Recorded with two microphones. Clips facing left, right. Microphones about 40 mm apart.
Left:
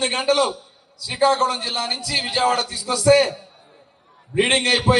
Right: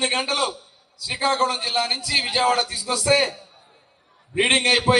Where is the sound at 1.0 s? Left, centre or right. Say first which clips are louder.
Left 5 dB; right.